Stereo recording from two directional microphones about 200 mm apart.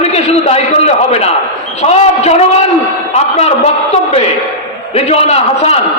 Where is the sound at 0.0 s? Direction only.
35° left (ahead or behind).